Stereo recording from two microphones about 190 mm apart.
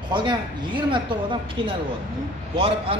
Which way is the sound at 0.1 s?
25° right (ahead or behind).